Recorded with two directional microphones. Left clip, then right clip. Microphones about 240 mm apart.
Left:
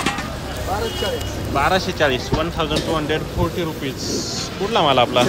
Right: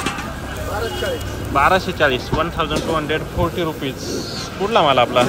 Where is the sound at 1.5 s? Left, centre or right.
Centre.